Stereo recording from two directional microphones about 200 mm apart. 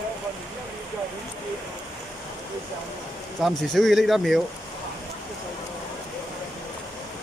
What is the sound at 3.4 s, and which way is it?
Speech, centre (ahead or behind).